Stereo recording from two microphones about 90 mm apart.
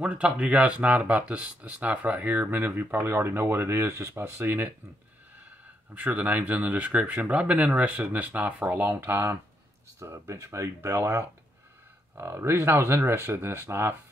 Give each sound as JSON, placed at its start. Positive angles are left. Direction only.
{"t": 0.0, "sound": "speech", "side_deg": -15}
{"t": 5.9, "sound": "speech", "side_deg": -20}